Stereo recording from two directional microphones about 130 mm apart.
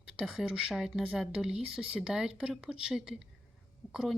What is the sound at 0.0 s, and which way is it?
Speech, 5° right (ahead or behind).